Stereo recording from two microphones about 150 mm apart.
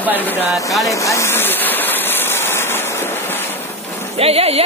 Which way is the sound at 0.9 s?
20° left (ahead or behind).